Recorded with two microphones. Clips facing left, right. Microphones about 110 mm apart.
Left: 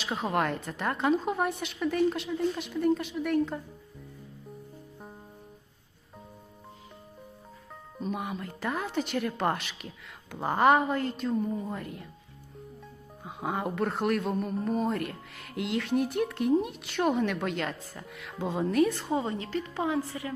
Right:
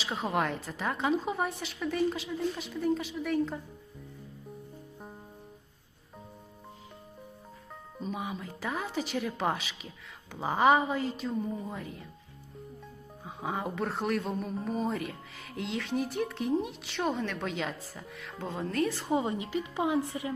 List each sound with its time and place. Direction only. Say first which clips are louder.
0.0 s speech: left 2 dB; centre (ahead or behind)
7.9 s speech: left 2 dB; centre (ahead or behind)
13.2 s speech: left 2 dB; centre (ahead or behind)
18.4 s speech: left 6 dB; 15° left (ahead or behind)
18.8 s speech: left 5 dB; centre (ahead or behind)
19.0 s a woman's voice: even; 15° right (ahead or behind)